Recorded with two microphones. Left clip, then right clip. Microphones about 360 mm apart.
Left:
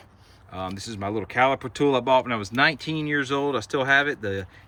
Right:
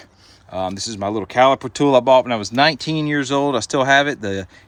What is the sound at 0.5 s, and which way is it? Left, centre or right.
Speech, centre.